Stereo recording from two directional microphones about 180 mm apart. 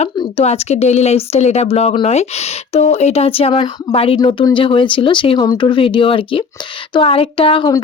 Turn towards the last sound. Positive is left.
turn(degrees=30)  # may be behind; listen again after turning